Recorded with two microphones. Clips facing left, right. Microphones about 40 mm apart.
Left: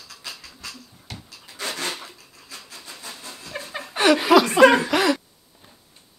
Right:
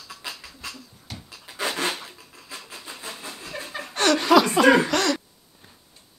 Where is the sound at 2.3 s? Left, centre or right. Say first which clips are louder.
Right 2 dB; centre.